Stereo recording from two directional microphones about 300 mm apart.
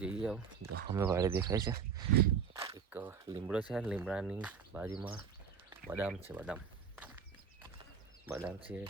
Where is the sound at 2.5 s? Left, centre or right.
Centre.